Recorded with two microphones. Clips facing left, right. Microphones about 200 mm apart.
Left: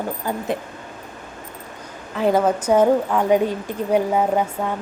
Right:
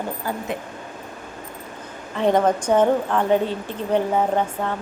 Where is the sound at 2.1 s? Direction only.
5° left (ahead or behind).